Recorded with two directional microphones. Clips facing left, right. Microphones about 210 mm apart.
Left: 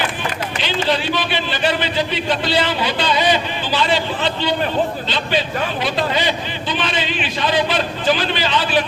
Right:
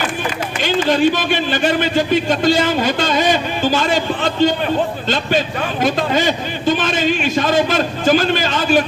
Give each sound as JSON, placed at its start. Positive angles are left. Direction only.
{"t": 0.6, "sound": "a man's voice", "side_deg": -45}